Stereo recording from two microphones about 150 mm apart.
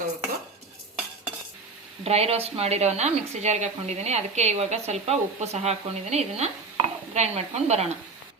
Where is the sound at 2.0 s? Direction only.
45° right (ahead or behind).